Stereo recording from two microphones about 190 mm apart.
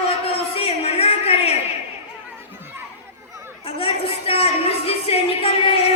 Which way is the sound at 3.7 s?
30° left (ahead or behind).